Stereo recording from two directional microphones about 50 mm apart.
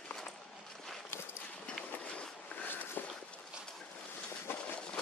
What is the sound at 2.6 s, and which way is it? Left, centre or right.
Walk, left.